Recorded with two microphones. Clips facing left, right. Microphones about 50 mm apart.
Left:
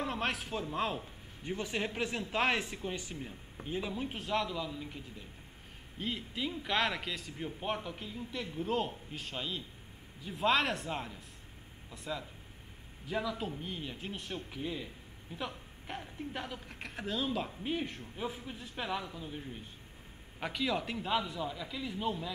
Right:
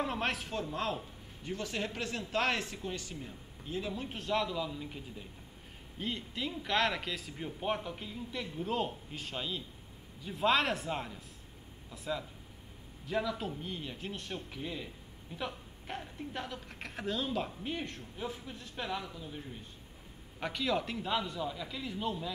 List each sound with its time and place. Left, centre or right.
0.0 s a woman's voice: centre
5.9 s a man's voice: centre